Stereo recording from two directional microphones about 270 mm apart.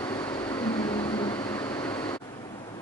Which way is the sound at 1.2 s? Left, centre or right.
Centre.